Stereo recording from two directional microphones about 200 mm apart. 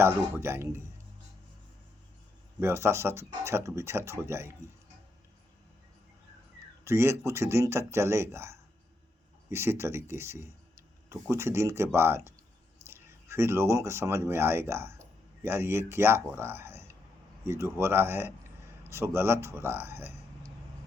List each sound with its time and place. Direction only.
0.0 s speech: 10° right (ahead or behind)
2.6 s speech: 10° right (ahead or behind)
6.8 s speech: 15° right (ahead or behind)